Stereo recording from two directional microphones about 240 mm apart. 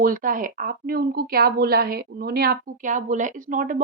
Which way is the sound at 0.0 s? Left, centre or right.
Right.